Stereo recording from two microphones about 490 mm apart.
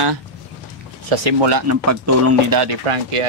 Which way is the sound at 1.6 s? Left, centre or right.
Right.